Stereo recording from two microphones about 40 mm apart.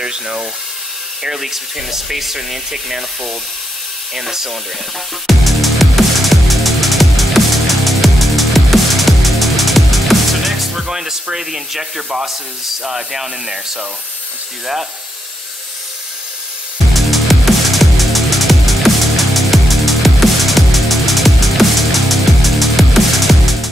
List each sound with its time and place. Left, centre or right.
0.0 s speech: centre
5.2 s music: centre
10.8 s music: centre
11.3 s speech: centre
16.9 s music: centre